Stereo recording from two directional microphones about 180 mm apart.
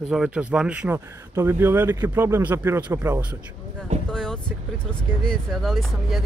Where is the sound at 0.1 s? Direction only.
5° right (ahead or behind).